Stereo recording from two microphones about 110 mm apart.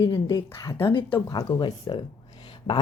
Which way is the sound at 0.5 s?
30° left (ahead or behind).